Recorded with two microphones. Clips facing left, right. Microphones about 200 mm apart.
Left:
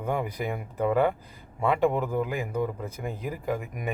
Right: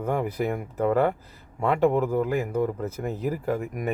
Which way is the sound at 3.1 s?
40° right (ahead or behind).